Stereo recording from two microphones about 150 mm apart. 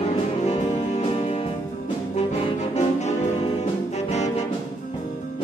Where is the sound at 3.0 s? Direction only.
50° left (ahead or behind).